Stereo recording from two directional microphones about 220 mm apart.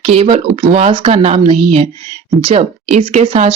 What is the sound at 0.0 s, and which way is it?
Speech, 25° right (ahead or behind).